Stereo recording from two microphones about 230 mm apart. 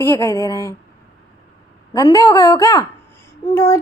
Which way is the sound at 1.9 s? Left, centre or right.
Centre.